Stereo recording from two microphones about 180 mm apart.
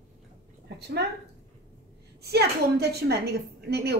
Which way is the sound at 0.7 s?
65° right (ahead or behind).